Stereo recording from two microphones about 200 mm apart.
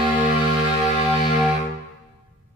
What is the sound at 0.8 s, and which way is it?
Music, 35° left (ahead or behind).